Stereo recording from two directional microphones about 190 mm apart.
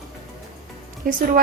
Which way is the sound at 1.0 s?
50° right (ahead or behind).